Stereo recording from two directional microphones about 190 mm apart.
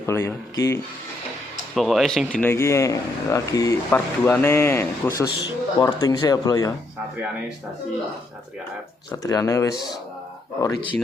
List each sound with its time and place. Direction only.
0.0 s speech: 15° left (ahead or behind)
1.7 s speech: centre (ahead or behind); by 6.7 s 20° left (ahead or behind)
9.2 s speech: 20° left (ahead or behind)